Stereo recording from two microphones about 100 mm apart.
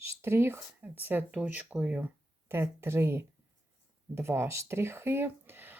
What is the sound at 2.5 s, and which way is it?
Speech, 25° right (ahead or behind).